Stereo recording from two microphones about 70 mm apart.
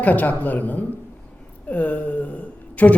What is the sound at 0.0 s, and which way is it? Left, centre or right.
A woman's voice, left.